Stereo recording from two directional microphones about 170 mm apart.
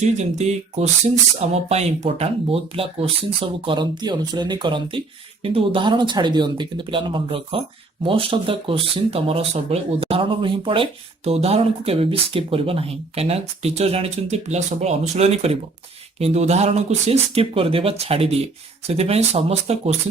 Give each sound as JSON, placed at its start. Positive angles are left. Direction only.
{"t": 0.0, "sound": "speech", "side_deg": -40}